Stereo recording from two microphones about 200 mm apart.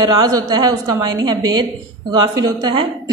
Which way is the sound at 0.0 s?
20° right (ahead or behind).